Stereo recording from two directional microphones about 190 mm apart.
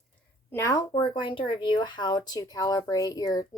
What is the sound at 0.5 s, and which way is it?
Speech, 15° left (ahead or behind).